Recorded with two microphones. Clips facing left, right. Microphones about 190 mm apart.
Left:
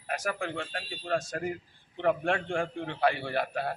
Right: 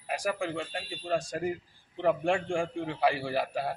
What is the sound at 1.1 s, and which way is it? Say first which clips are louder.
Speech: even; 15° right (ahead or behind).